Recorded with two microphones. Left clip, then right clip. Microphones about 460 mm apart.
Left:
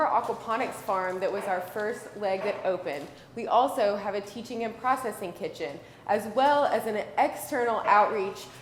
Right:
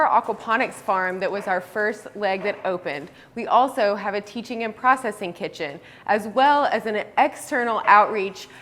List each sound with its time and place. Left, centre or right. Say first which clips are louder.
0.0 s a woman's voice: right 6 dB; right